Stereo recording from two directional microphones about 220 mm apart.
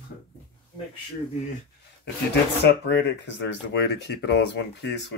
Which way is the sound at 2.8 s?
50° left (ahead or behind).